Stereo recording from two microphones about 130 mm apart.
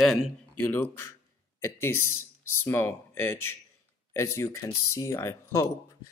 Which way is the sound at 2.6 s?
15° left (ahead or behind).